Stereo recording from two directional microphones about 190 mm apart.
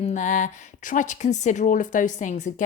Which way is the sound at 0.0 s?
40° left (ahead or behind).